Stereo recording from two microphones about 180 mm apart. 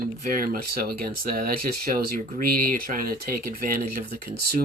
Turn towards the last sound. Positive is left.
turn(degrees=-55)  # may be behind; listen again after turning